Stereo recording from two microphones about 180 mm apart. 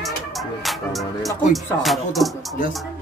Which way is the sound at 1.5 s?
Centre (ahead or behind).